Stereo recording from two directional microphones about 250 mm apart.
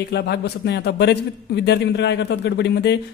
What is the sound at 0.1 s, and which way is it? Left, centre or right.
A man's voice, left.